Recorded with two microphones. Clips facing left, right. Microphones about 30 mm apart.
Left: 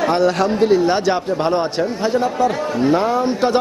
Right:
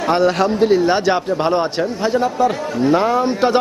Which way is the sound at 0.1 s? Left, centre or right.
Centre.